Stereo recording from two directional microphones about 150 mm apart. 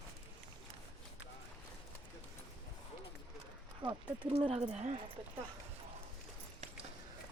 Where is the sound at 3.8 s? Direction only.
30° right (ahead or behind); by 5.0 s 45° right (ahead or behind).